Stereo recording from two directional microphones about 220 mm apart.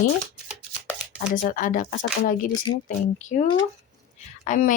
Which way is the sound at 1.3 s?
35° left (ahead or behind).